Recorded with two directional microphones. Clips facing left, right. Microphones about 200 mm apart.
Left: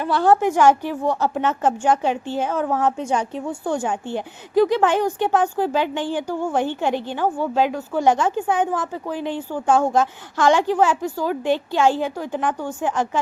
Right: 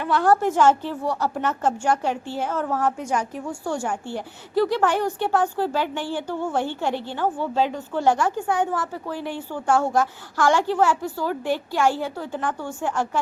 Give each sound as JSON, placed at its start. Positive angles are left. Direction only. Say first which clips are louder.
{"t": 0.0, "sound": "a woman's voice", "louder": "left 2 dB", "side_deg": 30}
{"t": 0.3, "sound": "a woman's voice", "louder": "left 2 dB", "side_deg": 15}